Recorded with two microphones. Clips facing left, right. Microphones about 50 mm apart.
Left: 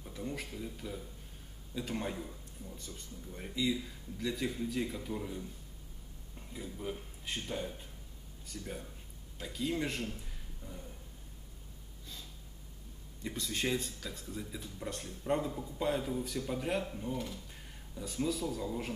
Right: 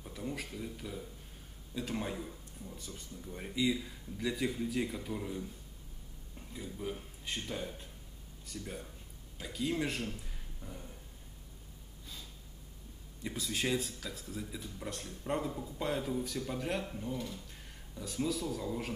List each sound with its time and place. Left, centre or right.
0.0 s speech: centre
6.5 s speech: centre
10.6 s a sound: right
13.2 s speech: centre